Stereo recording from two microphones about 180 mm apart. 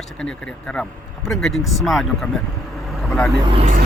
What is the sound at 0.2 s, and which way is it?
Speech, 5° left (ahead or behind).